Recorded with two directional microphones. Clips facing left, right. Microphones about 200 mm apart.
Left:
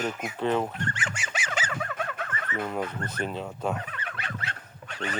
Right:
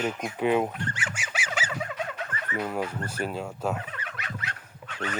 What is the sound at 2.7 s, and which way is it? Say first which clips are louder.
Speech: right 1 dB; 5° right (ahead or behind).